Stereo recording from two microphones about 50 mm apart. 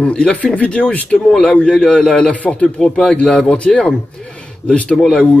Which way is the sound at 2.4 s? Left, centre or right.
Left.